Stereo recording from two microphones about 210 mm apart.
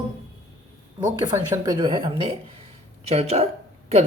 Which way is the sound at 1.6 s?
20° right (ahead or behind).